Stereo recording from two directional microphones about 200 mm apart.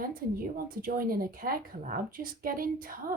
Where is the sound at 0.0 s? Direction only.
45° right (ahead or behind).